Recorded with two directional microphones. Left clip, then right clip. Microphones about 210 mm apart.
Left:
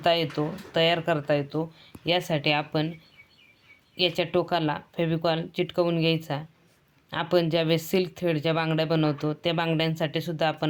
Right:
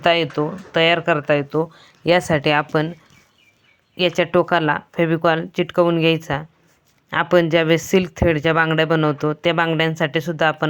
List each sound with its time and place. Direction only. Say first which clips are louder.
0.0 s speech: right 7 dB; 20° right (ahead or behind)
3.9 s speech: right 8 dB; 25° right (ahead or behind)